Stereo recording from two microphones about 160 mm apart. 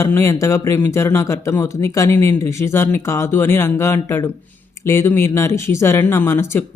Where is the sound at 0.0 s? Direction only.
15° left (ahead or behind).